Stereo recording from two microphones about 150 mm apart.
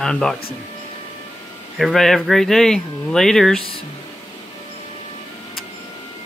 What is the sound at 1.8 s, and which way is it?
Speech, centre (ahead or behind).